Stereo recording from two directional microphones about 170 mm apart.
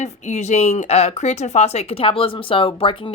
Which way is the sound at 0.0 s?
45° left (ahead or behind).